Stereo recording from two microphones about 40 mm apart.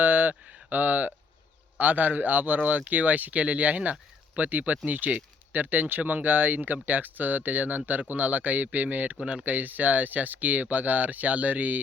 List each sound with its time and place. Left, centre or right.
0.0 s a sound: right
0.7 s speech: right
9.5 s speech: right